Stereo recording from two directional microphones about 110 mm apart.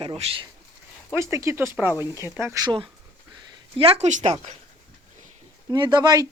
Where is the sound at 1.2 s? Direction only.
25° right (ahead or behind).